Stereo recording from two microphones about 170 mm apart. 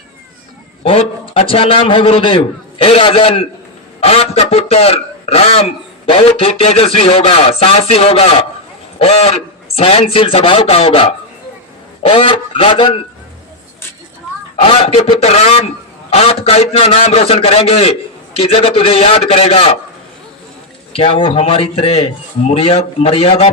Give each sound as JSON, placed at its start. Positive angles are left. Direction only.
{"t": 0.9, "sound": "speech", "side_deg": 35}
{"t": 14.6, "sound": "speech", "side_deg": 35}
{"t": 20.9, "sound": "speech", "side_deg": 35}